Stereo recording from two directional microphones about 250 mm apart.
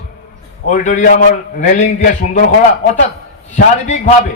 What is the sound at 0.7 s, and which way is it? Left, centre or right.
A man's voice, left.